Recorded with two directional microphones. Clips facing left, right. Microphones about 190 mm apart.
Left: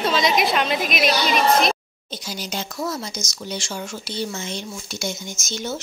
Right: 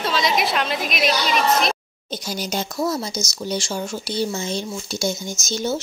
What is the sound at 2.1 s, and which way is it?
Speech, 45° right (ahead or behind).